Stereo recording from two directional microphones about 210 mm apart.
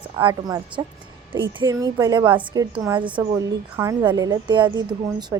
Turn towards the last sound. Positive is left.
turn(degrees=-15)  # may be behind; listen again after turning